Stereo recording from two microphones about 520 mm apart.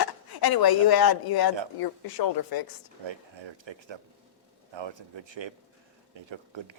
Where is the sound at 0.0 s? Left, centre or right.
Left.